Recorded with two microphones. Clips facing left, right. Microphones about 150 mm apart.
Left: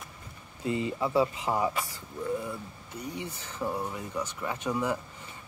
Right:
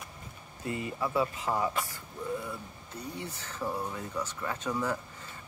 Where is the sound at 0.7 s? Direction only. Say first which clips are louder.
Left 4 dB; 20° left (ahead or behind).